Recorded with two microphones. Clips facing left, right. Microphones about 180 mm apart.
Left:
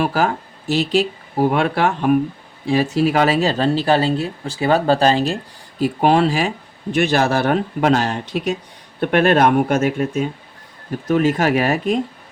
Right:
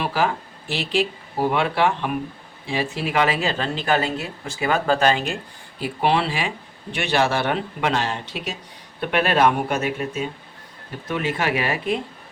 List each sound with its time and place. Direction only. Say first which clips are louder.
0.0 s speech: left 4 dB; 45° left (ahead or behind)
11.1 s speech: left 8 dB; 40° left (ahead or behind)